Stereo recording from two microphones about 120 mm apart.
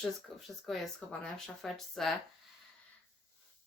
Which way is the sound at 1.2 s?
Centre (ahead or behind).